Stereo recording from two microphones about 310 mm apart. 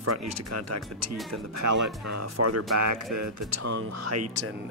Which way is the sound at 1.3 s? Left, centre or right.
Right.